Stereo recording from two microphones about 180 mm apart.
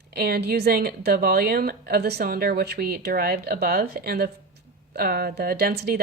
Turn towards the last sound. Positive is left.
turn(degrees=-60)  # may be behind; listen again after turning